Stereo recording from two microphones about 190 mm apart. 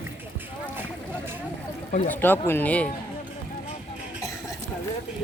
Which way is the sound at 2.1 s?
10° left (ahead or behind).